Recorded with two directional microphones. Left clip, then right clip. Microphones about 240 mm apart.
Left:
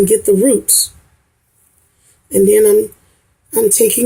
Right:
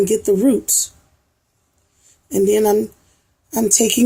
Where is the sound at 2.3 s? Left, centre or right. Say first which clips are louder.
Left 6 dB; centre.